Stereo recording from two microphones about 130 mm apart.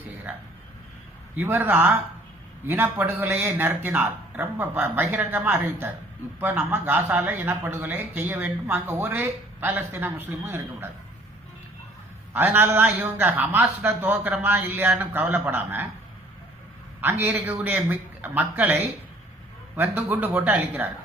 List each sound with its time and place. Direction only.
0.3 s speech: 15° right (ahead or behind)
12.3 s speech: 15° right (ahead or behind)
17.0 s speech: 15° right (ahead or behind)
20.1 s speech: 15° right (ahead or behind)